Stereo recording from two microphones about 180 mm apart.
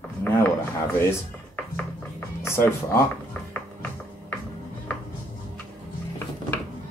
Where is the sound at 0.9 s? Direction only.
15° left (ahead or behind).